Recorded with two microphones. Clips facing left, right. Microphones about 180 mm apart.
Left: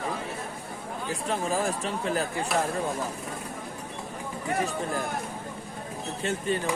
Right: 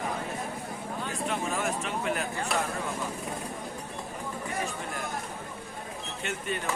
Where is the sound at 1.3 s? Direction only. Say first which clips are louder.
Left 4 dB; 35° left (ahead or behind).